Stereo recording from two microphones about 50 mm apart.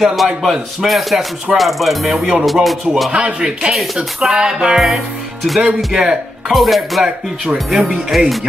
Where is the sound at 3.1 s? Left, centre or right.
Right.